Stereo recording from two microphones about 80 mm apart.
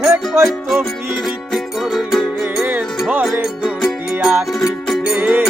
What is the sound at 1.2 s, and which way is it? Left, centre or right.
Music, centre.